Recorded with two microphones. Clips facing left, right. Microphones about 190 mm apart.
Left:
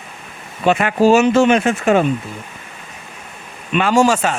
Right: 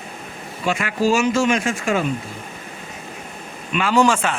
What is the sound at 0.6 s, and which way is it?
Speech, 60° left (ahead or behind).